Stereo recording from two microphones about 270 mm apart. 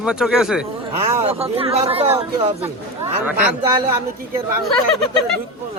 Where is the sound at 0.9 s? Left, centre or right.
Right.